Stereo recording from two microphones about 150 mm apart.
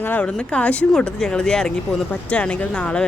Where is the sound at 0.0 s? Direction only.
10° left (ahead or behind).